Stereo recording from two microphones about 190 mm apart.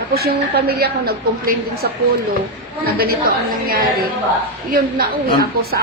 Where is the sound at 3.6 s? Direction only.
50° right (ahead or behind).